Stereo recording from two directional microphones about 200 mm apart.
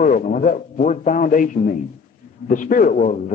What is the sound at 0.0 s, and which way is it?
A man's voice, 40° left (ahead or behind).